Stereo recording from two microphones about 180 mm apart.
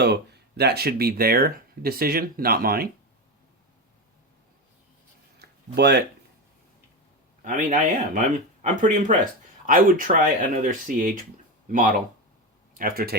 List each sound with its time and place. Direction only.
0.0 s speech: 65° right (ahead or behind)
5.4 s a sound: 65° right (ahead or behind)
7.4 s speech: 45° right (ahead or behind)